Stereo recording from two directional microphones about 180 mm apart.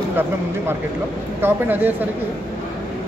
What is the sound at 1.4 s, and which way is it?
Speech, 10° right (ahead or behind).